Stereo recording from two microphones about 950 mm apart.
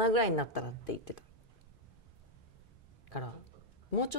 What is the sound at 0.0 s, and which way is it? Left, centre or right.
Speech, left.